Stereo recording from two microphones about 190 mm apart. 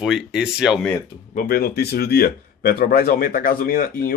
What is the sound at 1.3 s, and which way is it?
Speech, 50° left (ahead or behind).